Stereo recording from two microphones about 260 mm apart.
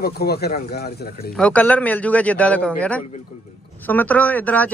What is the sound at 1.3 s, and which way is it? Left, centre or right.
Speech, centre.